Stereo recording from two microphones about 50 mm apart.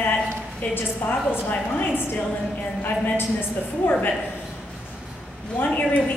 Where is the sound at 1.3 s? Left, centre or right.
Left.